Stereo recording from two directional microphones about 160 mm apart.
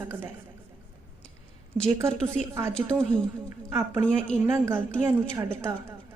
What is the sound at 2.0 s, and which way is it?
A woman's voice, 15° right (ahead or behind).